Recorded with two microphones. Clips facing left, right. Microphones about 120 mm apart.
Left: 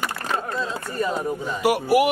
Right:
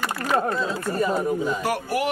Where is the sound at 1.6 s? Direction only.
10° left (ahead or behind).